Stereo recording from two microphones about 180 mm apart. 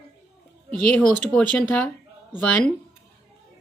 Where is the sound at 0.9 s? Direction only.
5° left (ahead or behind).